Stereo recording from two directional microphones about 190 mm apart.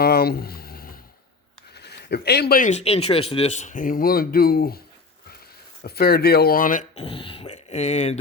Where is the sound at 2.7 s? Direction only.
35° left (ahead or behind).